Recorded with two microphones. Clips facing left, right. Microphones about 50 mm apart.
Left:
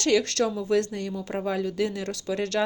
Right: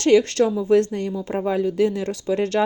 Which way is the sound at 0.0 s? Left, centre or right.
Right.